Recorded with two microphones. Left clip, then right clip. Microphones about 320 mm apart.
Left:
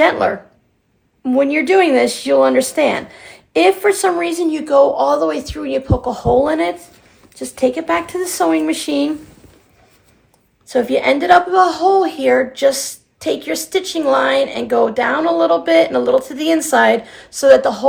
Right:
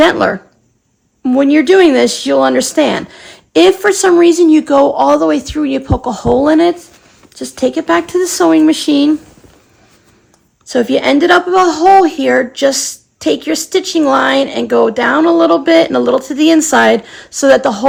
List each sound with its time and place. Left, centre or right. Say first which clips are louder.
0.0 s speech: right 4 dB; right
10.7 s speech: right 3 dB; right